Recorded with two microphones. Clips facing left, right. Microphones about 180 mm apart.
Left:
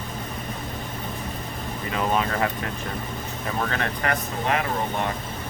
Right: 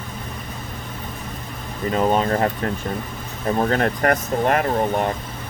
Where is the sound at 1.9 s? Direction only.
40° right (ahead or behind).